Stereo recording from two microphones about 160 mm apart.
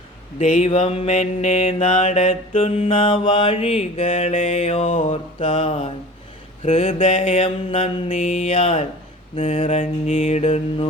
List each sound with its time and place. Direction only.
0.3 s mantra: 45° left (ahead or behind)
8.2 s mantra: 45° left (ahead or behind)
9.4 s mantra: 50° left (ahead or behind)